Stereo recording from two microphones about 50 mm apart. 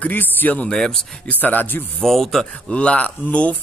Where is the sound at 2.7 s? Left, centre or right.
Left.